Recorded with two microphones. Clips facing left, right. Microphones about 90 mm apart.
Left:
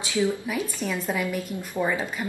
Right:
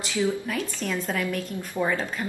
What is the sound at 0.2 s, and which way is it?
Speech, 10° left (ahead or behind).